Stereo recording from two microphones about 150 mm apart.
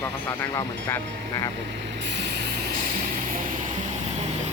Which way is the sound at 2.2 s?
90° right.